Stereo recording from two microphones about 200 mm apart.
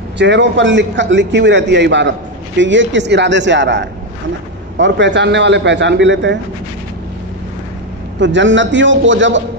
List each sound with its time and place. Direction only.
0.2 s a man's voice: 60° right (ahead or behind)
8.2 s a man's voice: 65° right (ahead or behind)